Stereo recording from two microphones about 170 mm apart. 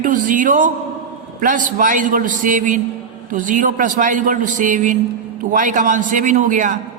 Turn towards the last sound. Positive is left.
turn(degrees=-50)  # may be behind; listen again after turning